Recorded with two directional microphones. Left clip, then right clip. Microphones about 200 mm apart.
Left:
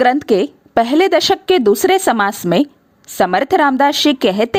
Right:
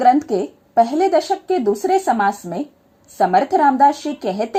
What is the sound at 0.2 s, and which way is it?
A woman's voice, 65° left (ahead or behind).